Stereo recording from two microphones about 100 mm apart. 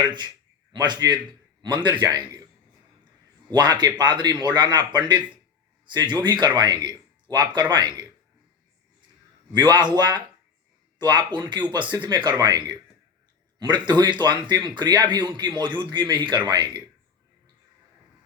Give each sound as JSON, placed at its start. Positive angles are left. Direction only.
{"t": 0.0, "sound": "speech", "side_deg": -50}
{"t": 3.5, "sound": "speech", "side_deg": -45}
{"t": 9.5, "sound": "speech", "side_deg": -45}